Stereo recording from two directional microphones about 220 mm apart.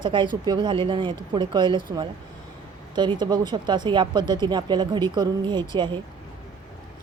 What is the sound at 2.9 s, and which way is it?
Speech, 20° right (ahead or behind).